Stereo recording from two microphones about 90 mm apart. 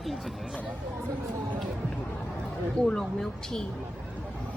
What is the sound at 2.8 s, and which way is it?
Speech, 5° left (ahead or behind).